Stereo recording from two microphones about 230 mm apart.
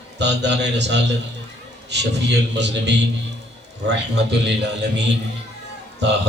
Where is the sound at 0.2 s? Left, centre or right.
Right.